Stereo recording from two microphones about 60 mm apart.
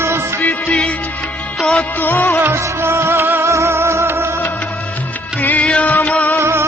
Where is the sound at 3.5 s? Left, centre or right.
Right.